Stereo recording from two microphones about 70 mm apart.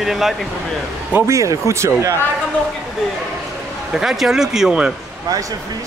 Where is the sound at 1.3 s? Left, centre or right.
Right.